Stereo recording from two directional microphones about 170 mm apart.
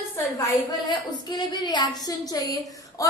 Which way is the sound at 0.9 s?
25° left (ahead or behind).